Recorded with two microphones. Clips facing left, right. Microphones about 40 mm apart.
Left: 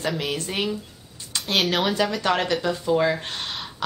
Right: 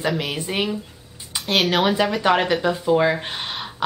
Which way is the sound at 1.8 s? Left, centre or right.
Centre.